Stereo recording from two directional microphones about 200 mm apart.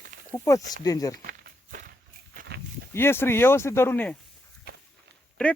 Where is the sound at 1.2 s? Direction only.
45° right (ahead or behind).